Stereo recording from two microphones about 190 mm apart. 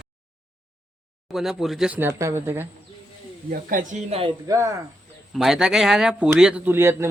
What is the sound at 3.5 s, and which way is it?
Speech, 45° right (ahead or behind).